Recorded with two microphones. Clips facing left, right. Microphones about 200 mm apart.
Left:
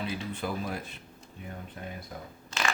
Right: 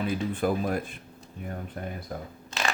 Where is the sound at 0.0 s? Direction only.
50° right (ahead or behind).